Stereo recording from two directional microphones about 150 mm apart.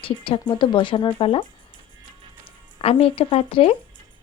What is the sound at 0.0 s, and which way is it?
Speech, 35° left (ahead or behind).